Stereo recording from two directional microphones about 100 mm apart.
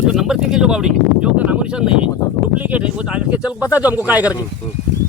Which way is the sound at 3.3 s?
15° right (ahead or behind).